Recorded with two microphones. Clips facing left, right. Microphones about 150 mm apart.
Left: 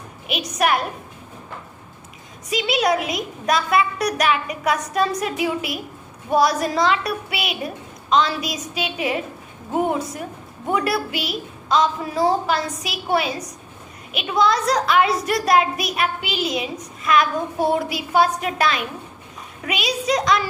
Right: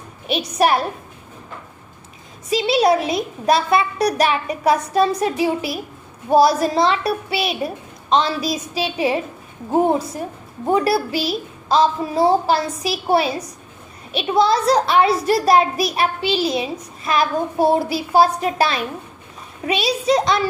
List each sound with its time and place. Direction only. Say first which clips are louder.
0.3 s a child's voice: right 4 dB; 30° right (ahead or behind)
2.5 s a child's voice: right 4 dB; 30° right (ahead or behind)